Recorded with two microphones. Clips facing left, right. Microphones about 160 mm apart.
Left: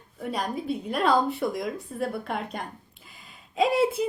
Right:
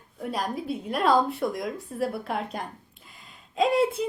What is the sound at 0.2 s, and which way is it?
Speech, centre (ahead or behind).